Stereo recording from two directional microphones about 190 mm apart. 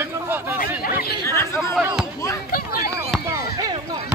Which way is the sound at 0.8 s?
50° left (ahead or behind).